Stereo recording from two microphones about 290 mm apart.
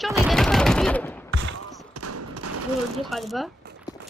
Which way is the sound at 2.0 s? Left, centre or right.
Right.